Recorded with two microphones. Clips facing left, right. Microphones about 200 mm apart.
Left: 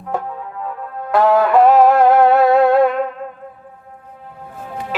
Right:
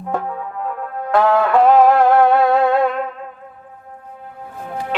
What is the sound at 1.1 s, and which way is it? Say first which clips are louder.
Music: left 2 dB; centre (ahead or behind).